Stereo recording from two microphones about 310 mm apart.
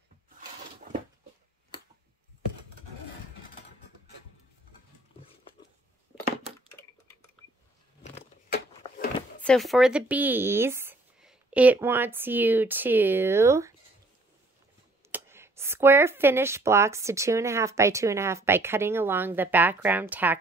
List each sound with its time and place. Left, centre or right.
8.0 s a sound: left
9.4 s speech: centre
15.0 s speech: centre